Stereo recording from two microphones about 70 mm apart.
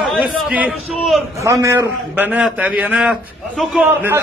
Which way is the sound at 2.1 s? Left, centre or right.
Right.